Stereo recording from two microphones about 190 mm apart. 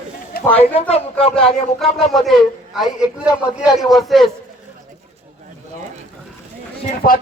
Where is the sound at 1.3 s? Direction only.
Centre (ahead or behind).